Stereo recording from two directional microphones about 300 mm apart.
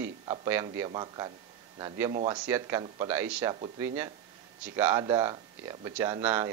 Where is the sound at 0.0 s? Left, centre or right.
Centre.